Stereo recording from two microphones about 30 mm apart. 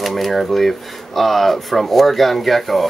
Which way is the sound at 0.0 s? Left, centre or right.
Centre.